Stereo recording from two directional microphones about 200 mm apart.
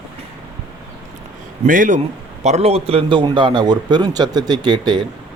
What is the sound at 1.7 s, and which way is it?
A man's voice, 40° right (ahead or behind).